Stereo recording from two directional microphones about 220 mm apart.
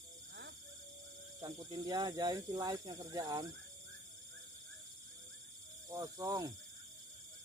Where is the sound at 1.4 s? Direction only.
15° right (ahead or behind).